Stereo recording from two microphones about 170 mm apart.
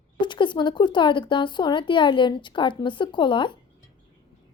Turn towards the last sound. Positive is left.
turn(degrees=30)  # may be behind; listen again after turning